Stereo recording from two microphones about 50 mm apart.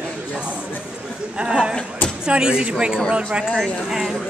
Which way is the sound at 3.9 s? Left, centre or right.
Centre.